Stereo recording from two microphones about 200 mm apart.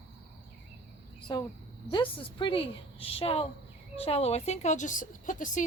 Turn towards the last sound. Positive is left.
turn(degrees=40)  # may be behind; listen again after turning